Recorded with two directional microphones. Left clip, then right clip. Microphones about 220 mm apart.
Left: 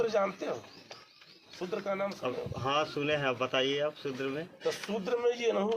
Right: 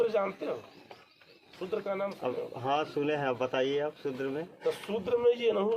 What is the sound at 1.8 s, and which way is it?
Speech, 25° left (ahead or behind).